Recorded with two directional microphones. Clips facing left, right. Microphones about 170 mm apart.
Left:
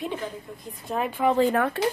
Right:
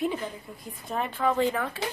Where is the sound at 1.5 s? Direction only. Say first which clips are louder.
Left 7 dB; 60° left (ahead or behind).